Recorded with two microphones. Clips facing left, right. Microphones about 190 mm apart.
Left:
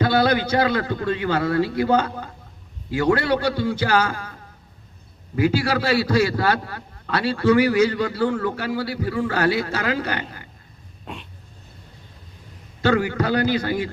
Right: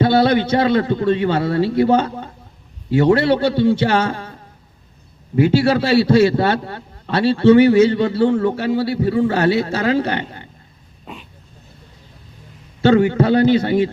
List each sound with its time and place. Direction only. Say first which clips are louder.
0.0 s a man's voice: right 5 dB; 25° right (ahead or behind)
5.4 s a man's voice: right 6 dB; 25° right (ahead or behind)
11.0 s dog: even; centre (ahead or behind)
12.8 s a man's voice: right 7 dB; 25° right (ahead or behind)